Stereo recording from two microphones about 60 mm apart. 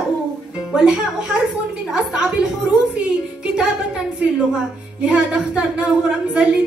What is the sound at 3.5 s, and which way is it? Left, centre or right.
A woman's voice, centre.